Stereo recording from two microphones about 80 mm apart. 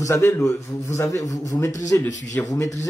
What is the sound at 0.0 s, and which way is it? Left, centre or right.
A man's voice, left.